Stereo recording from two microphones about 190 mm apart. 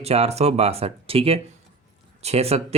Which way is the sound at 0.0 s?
35° right (ahead or behind).